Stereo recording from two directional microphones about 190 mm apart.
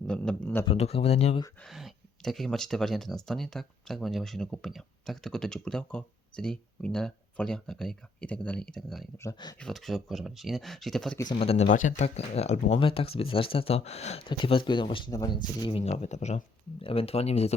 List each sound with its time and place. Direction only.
0.1 s a man's voice: 5° left (ahead or behind)
0.6 s speech: 30° left (ahead or behind)
1.6 s speech: centre (ahead or behind)
9.1 s a man's voice: 20° left (ahead or behind)
9.6 s speech: centre (ahead or behind)
11.3 s speech: 35° left (ahead or behind)